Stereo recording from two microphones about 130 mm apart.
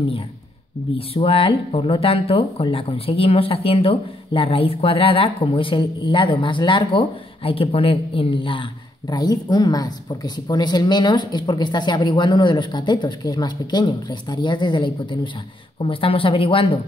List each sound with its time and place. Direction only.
0.9 s speech: 45° left (ahead or behind)
9.1 s speech: 30° left (ahead or behind)